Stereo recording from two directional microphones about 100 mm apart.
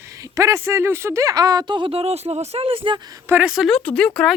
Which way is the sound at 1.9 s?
90° right.